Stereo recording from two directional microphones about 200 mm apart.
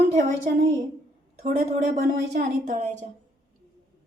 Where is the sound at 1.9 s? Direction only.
45° right (ahead or behind).